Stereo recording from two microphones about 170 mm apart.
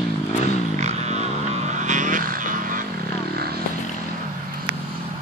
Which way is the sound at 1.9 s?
50° right (ahead or behind).